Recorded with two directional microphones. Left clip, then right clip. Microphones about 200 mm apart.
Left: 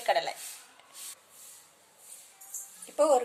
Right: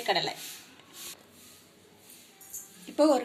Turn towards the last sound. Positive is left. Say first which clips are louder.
# even
turn(degrees=40)  # may be behind; listen again after turning